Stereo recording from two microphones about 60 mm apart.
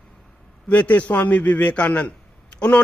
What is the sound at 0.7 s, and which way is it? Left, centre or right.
A man's voice, left.